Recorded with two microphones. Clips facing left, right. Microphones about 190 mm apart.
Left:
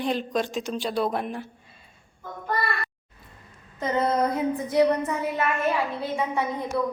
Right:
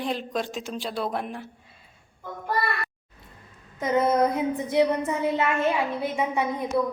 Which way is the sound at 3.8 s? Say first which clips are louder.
Right 2 dB; 15° right (ahead or behind).